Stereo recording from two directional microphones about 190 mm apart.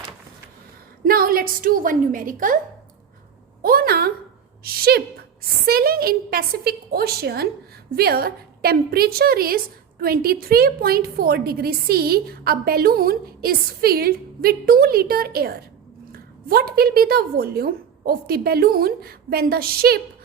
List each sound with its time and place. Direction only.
1.0 s a woman's voice: 50° right (ahead or behind)
3.6 s a woman's voice: 50° right (ahead or behind)